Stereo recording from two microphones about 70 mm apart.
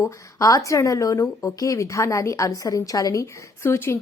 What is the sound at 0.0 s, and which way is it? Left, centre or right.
A woman's voice, left.